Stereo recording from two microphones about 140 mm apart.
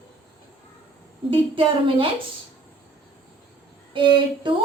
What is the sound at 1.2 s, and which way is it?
Speech, 40° right (ahead or behind).